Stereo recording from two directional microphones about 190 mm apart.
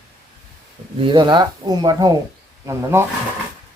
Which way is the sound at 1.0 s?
25° right (ahead or behind).